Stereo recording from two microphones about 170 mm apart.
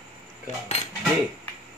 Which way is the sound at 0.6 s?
40° left (ahead or behind).